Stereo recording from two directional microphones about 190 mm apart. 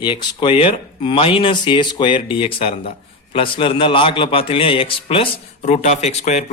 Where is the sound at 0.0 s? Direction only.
25° left (ahead or behind).